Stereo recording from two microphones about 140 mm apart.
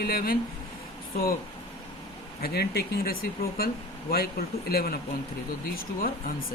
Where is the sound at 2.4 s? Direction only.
90° left.